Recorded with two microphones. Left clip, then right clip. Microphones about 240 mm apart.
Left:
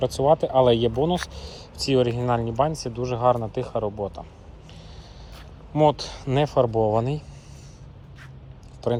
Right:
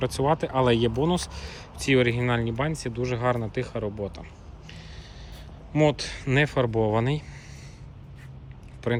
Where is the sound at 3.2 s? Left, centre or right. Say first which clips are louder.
Left 7 dB; centre.